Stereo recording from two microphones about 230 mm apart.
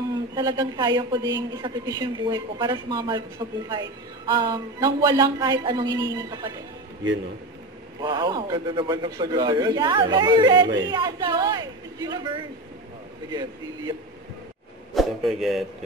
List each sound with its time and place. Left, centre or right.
0.1 s a man's voice: centre
8.0 s a man's voice: centre
13.3 s speech: centre
15.0 s speech: centre